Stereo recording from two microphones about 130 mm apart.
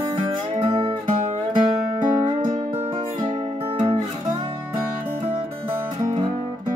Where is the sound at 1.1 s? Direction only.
85° right.